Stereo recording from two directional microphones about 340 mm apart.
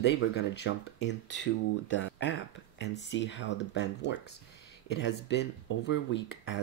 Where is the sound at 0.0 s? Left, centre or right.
Left.